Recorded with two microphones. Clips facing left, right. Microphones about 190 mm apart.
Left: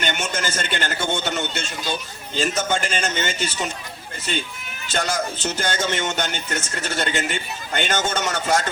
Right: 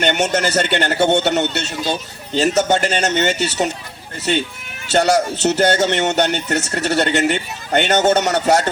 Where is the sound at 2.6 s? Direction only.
70° right (ahead or behind).